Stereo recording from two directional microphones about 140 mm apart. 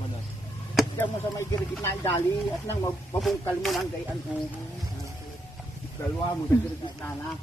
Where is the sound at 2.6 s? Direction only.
15° left (ahead or behind).